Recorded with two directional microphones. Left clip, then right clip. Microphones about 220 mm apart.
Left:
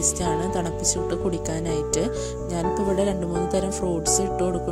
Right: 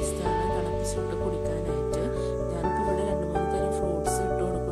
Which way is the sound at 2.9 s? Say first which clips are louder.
Left 3 dB; 35° left (ahead or behind).